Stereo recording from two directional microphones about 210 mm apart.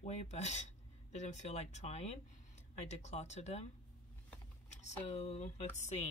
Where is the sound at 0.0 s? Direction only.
30° left (ahead or behind).